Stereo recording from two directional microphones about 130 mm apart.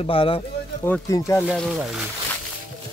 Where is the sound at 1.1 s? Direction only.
25° left (ahead or behind).